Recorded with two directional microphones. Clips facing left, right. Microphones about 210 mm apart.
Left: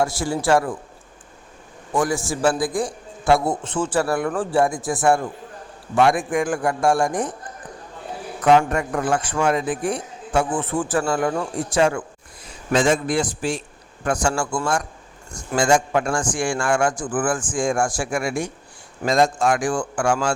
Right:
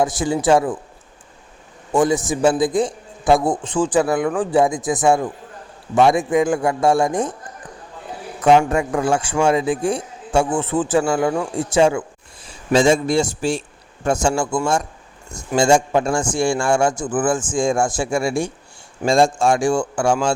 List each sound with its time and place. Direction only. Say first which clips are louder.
0.0 s a man's voice: right 3 dB; 20° right (ahead or behind)
1.9 s a man's voice: right 5 dB; 25° right (ahead or behind)
8.7 s a man's voice: right 3 dB; 25° right (ahead or behind)